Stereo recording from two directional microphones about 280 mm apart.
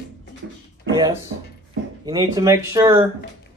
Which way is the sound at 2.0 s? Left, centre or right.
Centre.